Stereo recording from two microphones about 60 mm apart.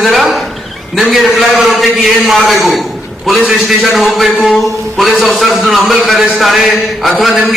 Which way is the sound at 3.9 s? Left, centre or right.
Centre.